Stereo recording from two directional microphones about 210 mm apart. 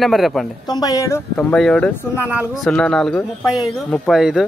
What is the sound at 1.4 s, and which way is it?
Speech, 5° left (ahead or behind).